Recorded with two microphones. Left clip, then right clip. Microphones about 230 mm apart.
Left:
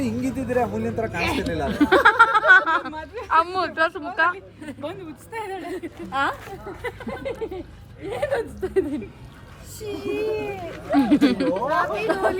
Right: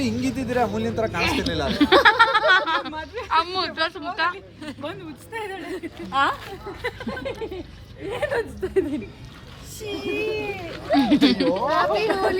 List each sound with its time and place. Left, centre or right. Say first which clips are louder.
0.0 s speech: right 1 dB; centre
0.6 s speech: right 2 dB; centre
1.1 s speech: right 1 dB; centre
11.6 s speech: right 1 dB; right
12.0 s speech: even; centre